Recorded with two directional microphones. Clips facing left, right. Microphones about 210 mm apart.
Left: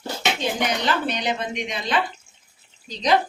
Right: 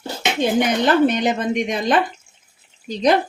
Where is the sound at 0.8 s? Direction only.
50° right (ahead or behind).